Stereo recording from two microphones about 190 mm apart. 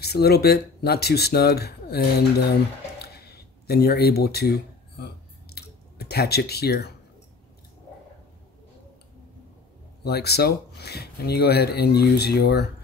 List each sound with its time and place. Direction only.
0.0 s speech: 55° left (ahead or behind)
3.0 s a sound: 55° left (ahead or behind)
10.0 s speech: 55° left (ahead or behind)